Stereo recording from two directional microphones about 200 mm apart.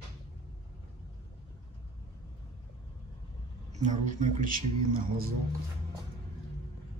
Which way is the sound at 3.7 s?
40° right (ahead or behind).